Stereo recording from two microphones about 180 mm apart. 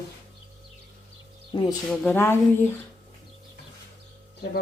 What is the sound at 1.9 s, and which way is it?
Speech, 10° left (ahead or behind).